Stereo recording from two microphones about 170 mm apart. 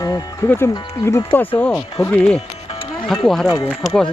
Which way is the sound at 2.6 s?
30° left (ahead or behind).